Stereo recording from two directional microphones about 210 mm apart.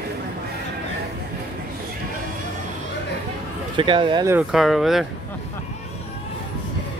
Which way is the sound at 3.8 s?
25° right (ahead or behind).